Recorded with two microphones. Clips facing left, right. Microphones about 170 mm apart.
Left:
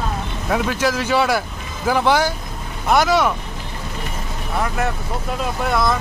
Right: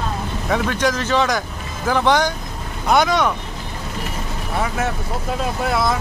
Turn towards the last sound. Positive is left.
turn(degrees=0)  # may be behind; listen again after turning